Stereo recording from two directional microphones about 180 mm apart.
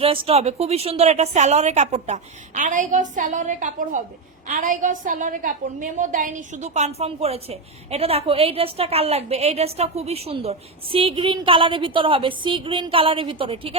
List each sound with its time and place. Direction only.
0.0 s a woman's voice: 30° right (ahead or behind)